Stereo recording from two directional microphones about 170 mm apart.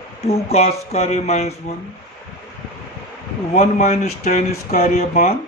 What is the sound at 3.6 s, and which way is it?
Speech, 40° left (ahead or behind).